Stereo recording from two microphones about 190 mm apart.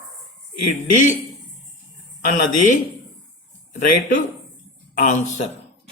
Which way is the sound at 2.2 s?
40° left (ahead or behind).